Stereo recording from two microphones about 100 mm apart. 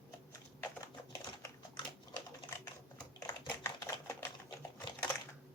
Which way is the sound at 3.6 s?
35° left (ahead or behind).